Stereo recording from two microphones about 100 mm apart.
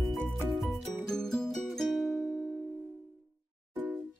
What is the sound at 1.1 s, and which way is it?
Music, 5° left (ahead or behind).